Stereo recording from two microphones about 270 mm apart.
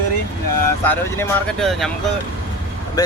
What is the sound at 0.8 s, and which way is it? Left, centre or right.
Speech, centre.